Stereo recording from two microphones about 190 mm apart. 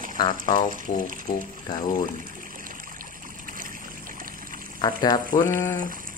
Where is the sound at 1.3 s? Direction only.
30° left (ahead or behind).